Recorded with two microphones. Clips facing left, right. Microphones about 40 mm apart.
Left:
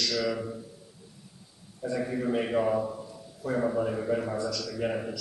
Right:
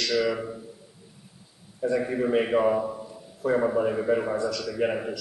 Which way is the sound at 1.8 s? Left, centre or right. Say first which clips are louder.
Right 5 dB; right.